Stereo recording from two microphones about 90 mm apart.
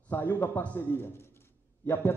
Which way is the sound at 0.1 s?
20° left (ahead or behind).